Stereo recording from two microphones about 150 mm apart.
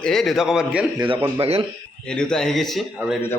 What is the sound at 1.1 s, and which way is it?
Speech, 35° right (ahead or behind).